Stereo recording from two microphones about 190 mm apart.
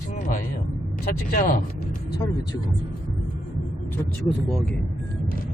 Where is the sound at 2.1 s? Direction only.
20° left (ahead or behind).